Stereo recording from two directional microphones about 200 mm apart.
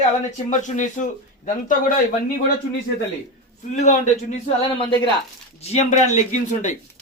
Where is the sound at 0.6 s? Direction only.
40° left (ahead or behind).